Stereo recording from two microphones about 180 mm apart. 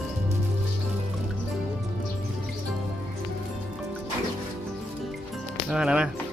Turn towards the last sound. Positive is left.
turn(degrees=-5)  # may be behind; listen again after turning